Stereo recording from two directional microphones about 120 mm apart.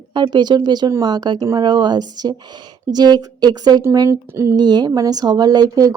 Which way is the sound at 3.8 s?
25° right (ahead or behind).